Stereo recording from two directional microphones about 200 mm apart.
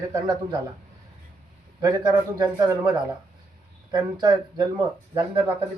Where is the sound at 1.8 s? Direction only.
20° right (ahead or behind).